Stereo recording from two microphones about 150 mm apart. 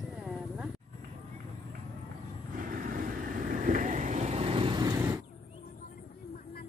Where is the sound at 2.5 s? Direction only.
65° right (ahead or behind); by 5.1 s 25° right (ahead or behind).